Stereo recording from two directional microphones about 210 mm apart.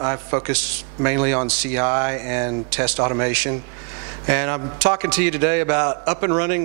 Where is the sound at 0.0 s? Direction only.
15° right (ahead or behind).